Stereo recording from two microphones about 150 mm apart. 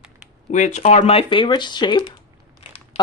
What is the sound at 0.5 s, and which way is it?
Speech, 50° left (ahead or behind).